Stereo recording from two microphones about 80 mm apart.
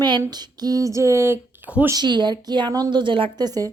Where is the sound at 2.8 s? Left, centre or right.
Right.